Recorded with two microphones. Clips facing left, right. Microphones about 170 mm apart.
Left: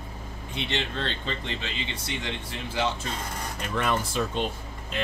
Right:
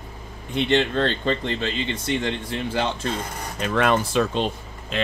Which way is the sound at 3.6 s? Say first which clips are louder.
Right 7 dB; 85° right.